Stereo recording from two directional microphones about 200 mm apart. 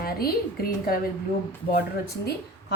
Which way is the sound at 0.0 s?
50° left (ahead or behind).